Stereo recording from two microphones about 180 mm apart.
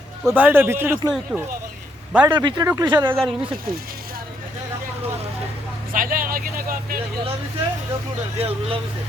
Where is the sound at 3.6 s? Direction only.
55° right (ahead or behind).